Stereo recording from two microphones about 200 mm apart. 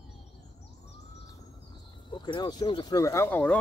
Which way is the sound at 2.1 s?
20° left (ahead or behind).